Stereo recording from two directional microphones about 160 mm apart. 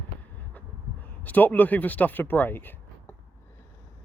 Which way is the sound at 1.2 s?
10° left (ahead or behind).